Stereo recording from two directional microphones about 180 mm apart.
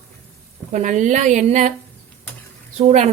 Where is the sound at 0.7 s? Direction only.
40° right (ahead or behind).